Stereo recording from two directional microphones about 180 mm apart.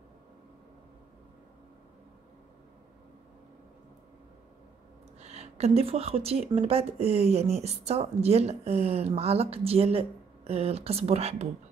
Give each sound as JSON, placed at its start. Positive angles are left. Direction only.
{"t": 5.2, "sound": "speech", "side_deg": -35}